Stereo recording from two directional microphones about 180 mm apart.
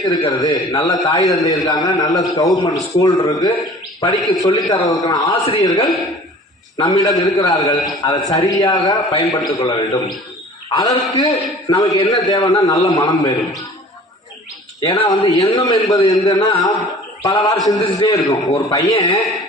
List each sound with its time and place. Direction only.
0.0 s a man's voice: 20° left (ahead or behind)
14.8 s a man's voice: 25° left (ahead or behind)
18.9 s a man's voice: 35° left (ahead or behind)